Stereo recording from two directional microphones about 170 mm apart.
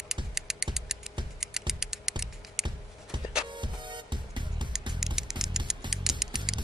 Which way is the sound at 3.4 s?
25° right (ahead or behind).